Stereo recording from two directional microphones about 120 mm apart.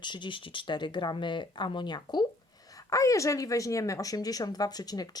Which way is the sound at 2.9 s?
25° left (ahead or behind).